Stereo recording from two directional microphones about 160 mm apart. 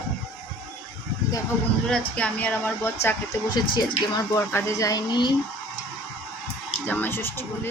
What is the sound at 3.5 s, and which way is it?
Speech, 25° left (ahead or behind).